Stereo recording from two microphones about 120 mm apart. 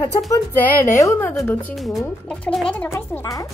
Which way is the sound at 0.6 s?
25° left (ahead or behind).